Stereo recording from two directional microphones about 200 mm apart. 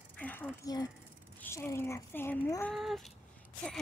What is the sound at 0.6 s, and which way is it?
Speech, 20° left (ahead or behind).